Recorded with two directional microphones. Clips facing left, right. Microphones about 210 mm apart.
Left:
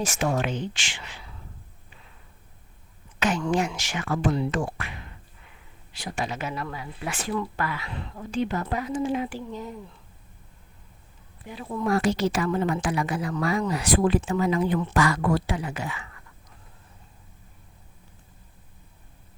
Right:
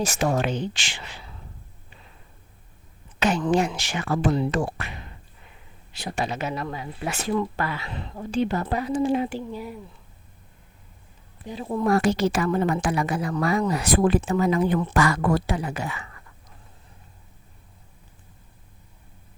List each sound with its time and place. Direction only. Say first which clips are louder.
0.0 s a woman's voice: right 2 dB; 35° right (ahead or behind)
3.2 s a woman's voice: right 3 dB; 30° right (ahead or behind)
6.1 s a woman's voice: right 3 dB; 35° right (ahead or behind)
6.4 s a woman's voice: right 3 dB; 25° right (ahead or behind)
9.5 s speech: right 1 dB; 10° right (ahead or behind)
11.4 s a woman's voice: right 4 dB; 30° right (ahead or behind)
12.0 s speech: right 2 dB; 55° right (ahead or behind); by 16.0 s 40° right (ahead or behind)